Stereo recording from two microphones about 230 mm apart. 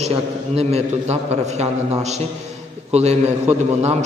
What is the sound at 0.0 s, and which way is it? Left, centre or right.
A man's voice, right.